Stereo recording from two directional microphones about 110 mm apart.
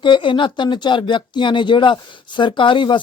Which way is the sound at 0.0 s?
50° left (ahead or behind).